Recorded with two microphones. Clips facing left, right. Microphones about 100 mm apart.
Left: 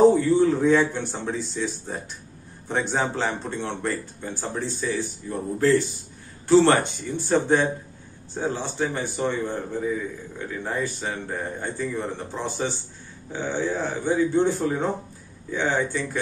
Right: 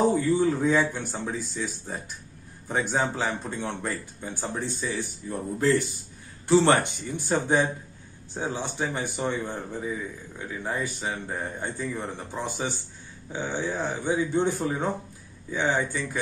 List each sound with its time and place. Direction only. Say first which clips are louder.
0.0 s a sound: left 7 dB; centre (ahead or behind)
0.4 s a man's voice: left 4 dB; 5° right (ahead or behind)
6.4 s a man's voice: left 3 dB; 15° right (ahead or behind)